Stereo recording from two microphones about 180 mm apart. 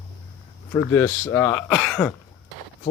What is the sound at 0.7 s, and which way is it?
Speech, 15° left (ahead or behind).